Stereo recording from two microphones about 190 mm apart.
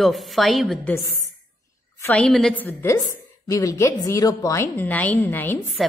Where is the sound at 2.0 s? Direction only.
10° left (ahead or behind).